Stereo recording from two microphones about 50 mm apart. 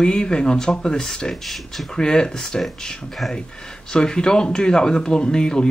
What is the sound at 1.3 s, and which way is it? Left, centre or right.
Speech, centre.